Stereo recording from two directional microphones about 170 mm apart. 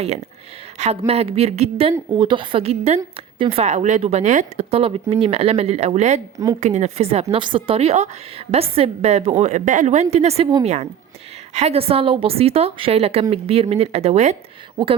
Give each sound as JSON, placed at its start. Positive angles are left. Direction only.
{"t": 0.8, "sound": "a woman's voice", "side_deg": -40}
{"t": 2.1, "sound": "a woman's voice", "side_deg": -30}
{"t": 6.3, "sound": "a woman's voice", "side_deg": -20}
{"t": 6.6, "sound": "a woman's voice", "side_deg": -45}